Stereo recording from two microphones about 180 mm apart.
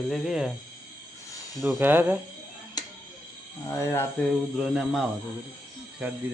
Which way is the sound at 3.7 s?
15° left (ahead or behind).